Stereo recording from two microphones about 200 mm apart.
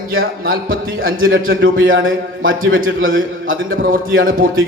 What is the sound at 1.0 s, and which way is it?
A man's voice, 80° right.